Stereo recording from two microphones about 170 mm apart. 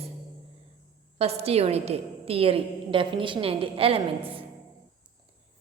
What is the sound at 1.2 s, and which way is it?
A woman's voice, 35° right (ahead or behind).